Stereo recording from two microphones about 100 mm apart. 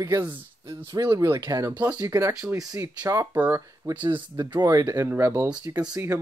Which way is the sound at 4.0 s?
50° right (ahead or behind).